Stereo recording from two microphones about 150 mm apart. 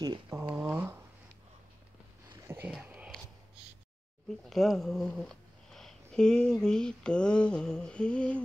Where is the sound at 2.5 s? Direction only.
10° right (ahead or behind).